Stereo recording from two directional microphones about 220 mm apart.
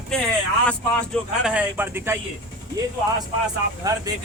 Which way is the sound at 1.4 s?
5° right (ahead or behind).